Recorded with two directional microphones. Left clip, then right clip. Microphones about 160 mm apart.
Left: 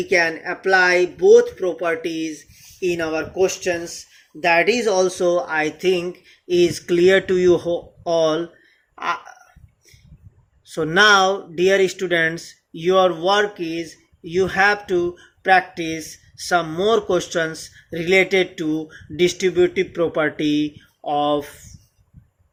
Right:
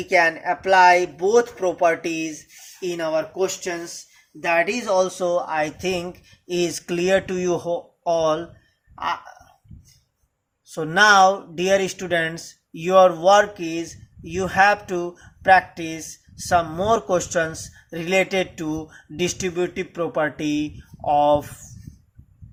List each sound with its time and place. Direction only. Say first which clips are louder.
0.0 s speech: even; 30° right (ahead or behind)
2.8 s speech: left 1 dB; 25° right (ahead or behind)
10.7 s speech: left 1 dB; 15° right (ahead or behind)